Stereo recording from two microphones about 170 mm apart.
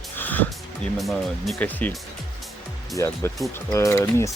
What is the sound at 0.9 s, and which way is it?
Speech, centre (ahead or behind).